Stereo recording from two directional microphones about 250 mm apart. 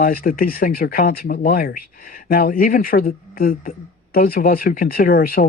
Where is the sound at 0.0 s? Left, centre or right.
Left.